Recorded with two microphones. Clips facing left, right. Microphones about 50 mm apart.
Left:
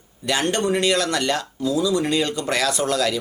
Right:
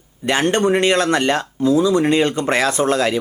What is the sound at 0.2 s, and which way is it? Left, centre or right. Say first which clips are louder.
Speech: right 5 dB; right.